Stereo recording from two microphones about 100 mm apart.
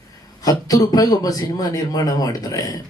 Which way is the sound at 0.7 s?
40° left (ahead or behind).